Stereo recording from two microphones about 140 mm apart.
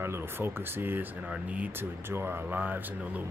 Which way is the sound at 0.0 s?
15° right (ahead or behind).